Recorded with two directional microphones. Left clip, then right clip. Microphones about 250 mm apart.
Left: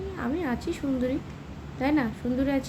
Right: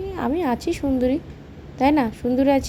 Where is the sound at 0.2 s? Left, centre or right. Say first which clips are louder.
Right 8 dB; right.